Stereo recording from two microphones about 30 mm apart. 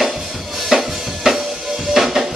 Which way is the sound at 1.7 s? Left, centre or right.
Centre.